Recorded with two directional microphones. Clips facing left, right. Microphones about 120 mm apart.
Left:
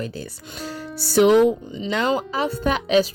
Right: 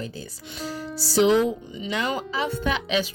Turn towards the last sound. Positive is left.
turn(degrees=40)  # may be behind; listen again after turning